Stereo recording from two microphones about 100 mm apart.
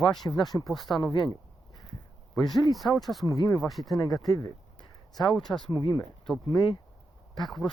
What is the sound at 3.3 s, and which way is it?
Speech, 40° left (ahead or behind).